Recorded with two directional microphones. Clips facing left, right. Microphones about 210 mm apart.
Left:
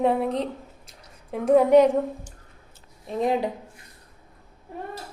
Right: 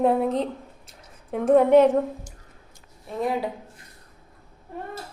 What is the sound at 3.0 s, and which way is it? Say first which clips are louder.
Speech: left 2 dB; 20° left (ahead or behind).